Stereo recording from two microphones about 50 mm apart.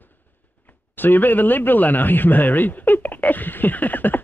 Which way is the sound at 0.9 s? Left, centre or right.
Left.